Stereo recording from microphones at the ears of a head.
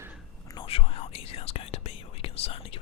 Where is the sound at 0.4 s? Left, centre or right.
Left.